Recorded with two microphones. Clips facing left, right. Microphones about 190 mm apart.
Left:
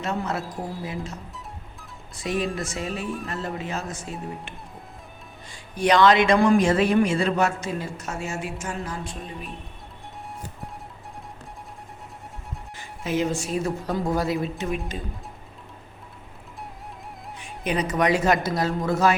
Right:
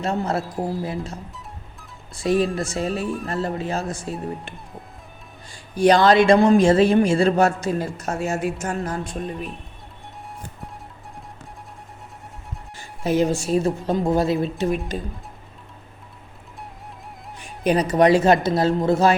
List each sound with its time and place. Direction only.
0.0 s speech: 30° right (ahead or behind)
2.2 s speech: 35° right (ahead or behind)
2.9 s music: centre (ahead or behind)
3.4 s speech: 35° right (ahead or behind)
4.0 s music: centre (ahead or behind)
5.7 s speech: 35° right (ahead or behind)
13.1 s speech: 35° right (ahead or behind)
17.6 s speech: 40° right (ahead or behind)